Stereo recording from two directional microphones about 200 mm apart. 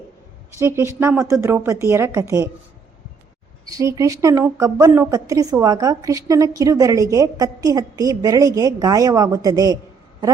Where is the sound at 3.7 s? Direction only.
15° right (ahead or behind).